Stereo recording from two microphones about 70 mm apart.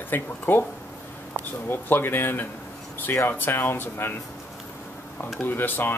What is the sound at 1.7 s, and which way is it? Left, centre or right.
Speech, left.